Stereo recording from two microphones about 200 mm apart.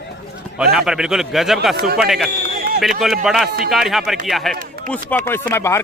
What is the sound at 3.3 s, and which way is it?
A man's voice, centre (ahead or behind).